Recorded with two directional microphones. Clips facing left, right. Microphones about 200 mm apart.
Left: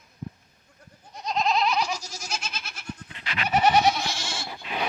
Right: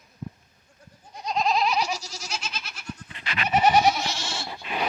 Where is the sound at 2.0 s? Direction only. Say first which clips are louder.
Even; 50° left (ahead or behind).